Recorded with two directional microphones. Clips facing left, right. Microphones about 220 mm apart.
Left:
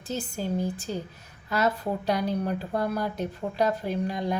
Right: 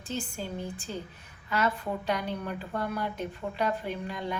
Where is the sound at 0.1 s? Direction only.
40° left (ahead or behind).